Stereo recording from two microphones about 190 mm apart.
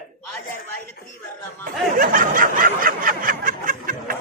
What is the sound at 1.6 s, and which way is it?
Snicker, 45° right (ahead or behind).